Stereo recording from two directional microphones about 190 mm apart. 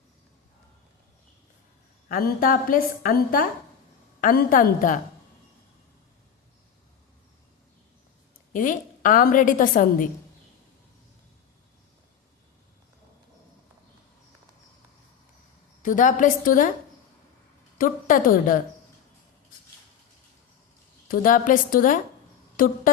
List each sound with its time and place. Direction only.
2.0 s a woman's voice: 50° left (ahead or behind)
8.5 s a woman's voice: 45° left (ahead or behind)
15.8 s a woman's voice: 45° left (ahead or behind)
17.7 s a woman's voice: 45° left (ahead or behind)
21.1 s a woman's voice: 45° left (ahead or behind)